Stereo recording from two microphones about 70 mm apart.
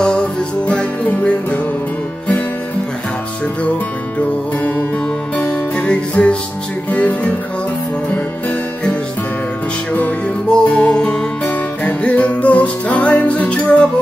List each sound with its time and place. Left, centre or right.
0.0 s music: centre
5.5 s music: centre
9.9 s music: centre